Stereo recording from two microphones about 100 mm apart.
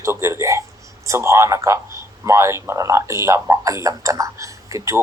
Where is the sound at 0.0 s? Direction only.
30° right (ahead or behind).